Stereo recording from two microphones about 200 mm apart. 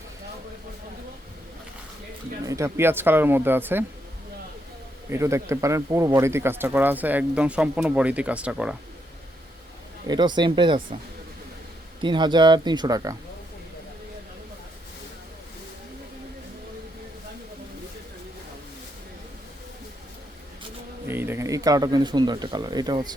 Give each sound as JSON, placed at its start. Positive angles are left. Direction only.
{"t": 2.5, "sound": "speech", "side_deg": -15}
{"t": 5.0, "sound": "speech", "side_deg": -15}
{"t": 10.1, "sound": "speech", "side_deg": -20}
{"t": 12.0, "sound": "speech", "side_deg": -20}
{"t": 21.1, "sound": "speech", "side_deg": -10}